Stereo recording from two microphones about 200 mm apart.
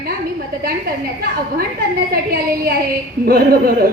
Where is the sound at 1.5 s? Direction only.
50° right (ahead or behind).